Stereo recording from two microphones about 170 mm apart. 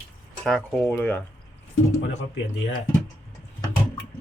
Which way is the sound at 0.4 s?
Centre (ahead or behind).